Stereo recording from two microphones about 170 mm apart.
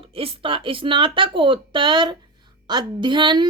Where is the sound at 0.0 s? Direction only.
35° right (ahead or behind).